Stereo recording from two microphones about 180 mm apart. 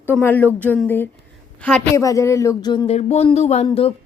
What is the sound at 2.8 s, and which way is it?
Speech, 35° left (ahead or behind).